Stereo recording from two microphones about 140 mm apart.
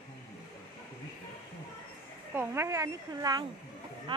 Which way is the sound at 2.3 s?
15° right (ahead or behind).